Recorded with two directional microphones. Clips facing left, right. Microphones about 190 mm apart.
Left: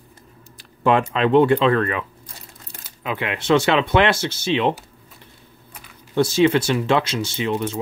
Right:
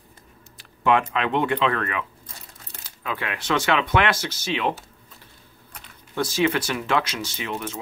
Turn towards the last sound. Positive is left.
turn(degrees=30)  # may be behind; listen again after turning